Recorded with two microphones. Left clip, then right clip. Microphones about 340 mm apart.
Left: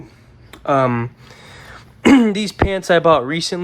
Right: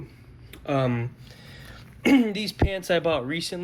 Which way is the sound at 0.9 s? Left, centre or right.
Centre.